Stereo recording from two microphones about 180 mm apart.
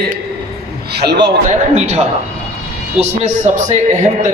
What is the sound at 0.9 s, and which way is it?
Speech, 65° right (ahead or behind).